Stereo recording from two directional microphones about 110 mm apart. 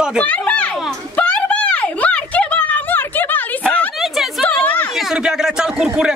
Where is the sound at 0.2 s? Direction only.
10° left (ahead or behind).